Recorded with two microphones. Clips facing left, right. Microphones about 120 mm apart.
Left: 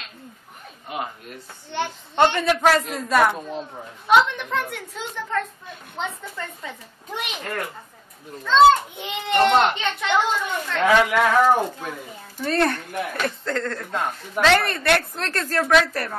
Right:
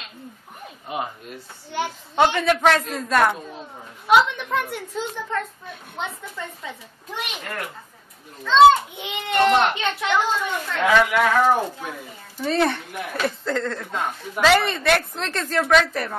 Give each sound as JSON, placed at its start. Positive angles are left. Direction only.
{"t": 1.7, "sound": "a child's voice", "side_deg": -5}
{"t": 8.5, "sound": "a child's voice", "side_deg": 0}